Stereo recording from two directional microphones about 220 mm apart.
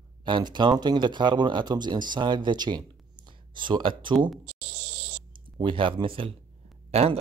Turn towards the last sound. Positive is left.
turn(degrees=-30)  # may be behind; listen again after turning